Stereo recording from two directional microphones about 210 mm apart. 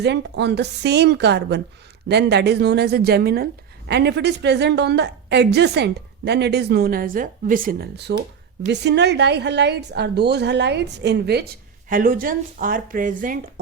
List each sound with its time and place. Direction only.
0.0 s speech: 55° right (ahead or behind)